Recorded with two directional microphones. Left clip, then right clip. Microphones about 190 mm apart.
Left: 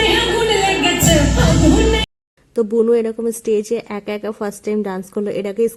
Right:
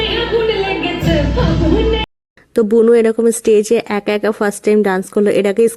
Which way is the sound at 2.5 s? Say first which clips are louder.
Right 5 dB; 15° right (ahead or behind).